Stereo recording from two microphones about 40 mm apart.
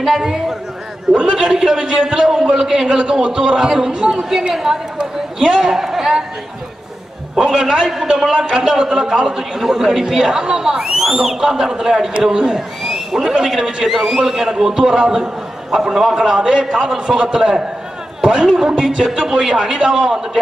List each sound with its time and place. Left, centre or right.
0.0 s a man's voice: centre
1.1 s a man's voice: centre
3.0 s a man's voice: right
4.9 s a sound: centre
5.6 s a man's voice: centre
7.3 s a man's voice: centre
12.8 s a sound: centre
13.3 s a man's voice: centre
13.8 s a man's voice: centre
16.3 s a man's voice: centre